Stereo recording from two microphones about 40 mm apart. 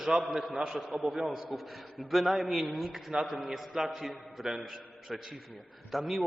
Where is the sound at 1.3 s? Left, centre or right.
Centre.